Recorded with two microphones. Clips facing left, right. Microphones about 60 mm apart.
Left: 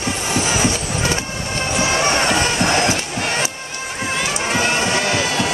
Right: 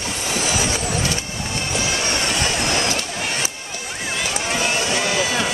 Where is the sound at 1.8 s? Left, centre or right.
Left.